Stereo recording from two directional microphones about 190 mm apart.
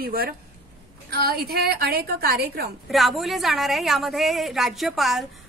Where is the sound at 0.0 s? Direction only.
50° right (ahead or behind).